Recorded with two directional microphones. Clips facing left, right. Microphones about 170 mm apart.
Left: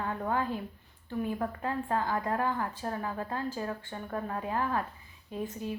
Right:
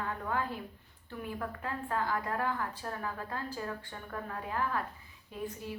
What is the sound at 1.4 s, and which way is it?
A woman's voice, 30° left (ahead or behind).